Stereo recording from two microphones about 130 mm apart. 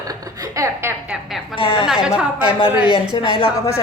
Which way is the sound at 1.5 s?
45° left (ahead or behind).